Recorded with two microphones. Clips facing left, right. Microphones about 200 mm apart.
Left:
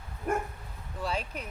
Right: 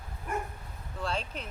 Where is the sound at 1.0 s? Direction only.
10° left (ahead or behind).